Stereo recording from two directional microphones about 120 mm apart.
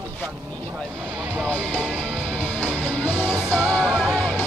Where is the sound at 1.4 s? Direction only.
10° left (ahead or behind).